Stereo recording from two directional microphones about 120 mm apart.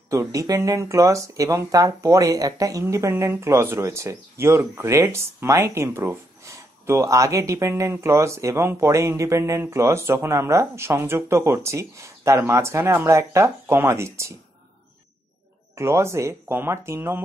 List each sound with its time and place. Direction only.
0.1 s speech: 25° right (ahead or behind)
15.7 s speech: 20° right (ahead or behind)